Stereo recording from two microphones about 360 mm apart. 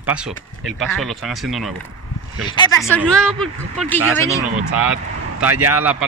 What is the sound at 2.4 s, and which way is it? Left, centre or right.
Speech, centre.